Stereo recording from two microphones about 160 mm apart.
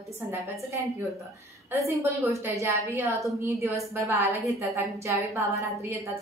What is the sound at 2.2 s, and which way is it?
A woman's voice, 20° right (ahead or behind).